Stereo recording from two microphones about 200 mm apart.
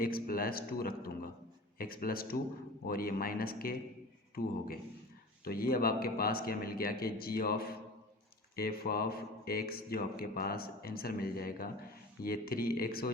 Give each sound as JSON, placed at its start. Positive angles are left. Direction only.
{"t": 0.0, "sound": "speech", "side_deg": 45}